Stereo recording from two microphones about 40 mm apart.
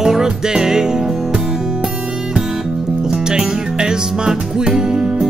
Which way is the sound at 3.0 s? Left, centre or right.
Centre.